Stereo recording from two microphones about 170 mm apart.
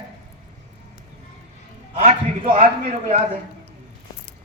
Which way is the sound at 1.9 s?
35° right (ahead or behind).